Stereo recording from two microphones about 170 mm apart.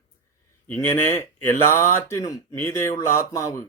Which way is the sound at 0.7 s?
10° left (ahead or behind).